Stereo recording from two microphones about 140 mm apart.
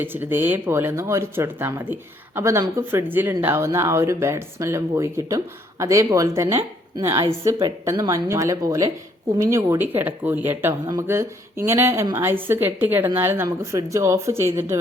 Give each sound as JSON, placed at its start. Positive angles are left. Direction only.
{"t": 0.0, "sound": "speech", "side_deg": -15}